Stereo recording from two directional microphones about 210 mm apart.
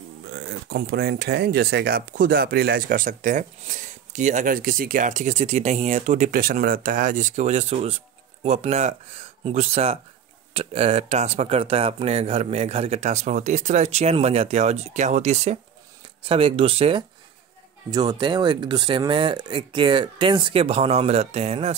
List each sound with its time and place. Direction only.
0.3 s speech: 45° right (ahead or behind); by 21.7 s 30° right (ahead or behind)